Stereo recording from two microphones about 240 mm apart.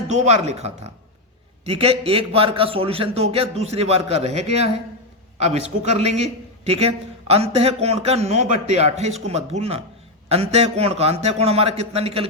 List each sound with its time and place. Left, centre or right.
0.1 s a man's voice: right
5.9 s a man's voice: right